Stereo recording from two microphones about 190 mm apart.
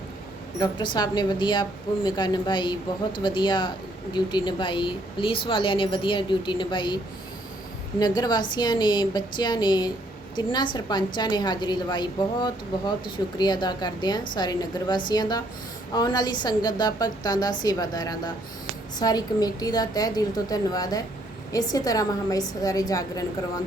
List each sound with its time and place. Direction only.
0.6 s a woman's voice: 20° left (ahead or behind)